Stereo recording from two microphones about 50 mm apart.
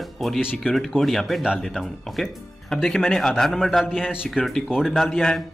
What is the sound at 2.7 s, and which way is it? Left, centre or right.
Speech, centre.